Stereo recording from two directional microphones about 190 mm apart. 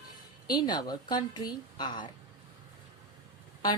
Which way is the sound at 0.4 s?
20° left (ahead or behind).